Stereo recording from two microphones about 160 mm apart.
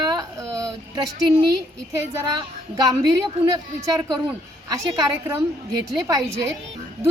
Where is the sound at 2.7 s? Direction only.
25° right (ahead or behind).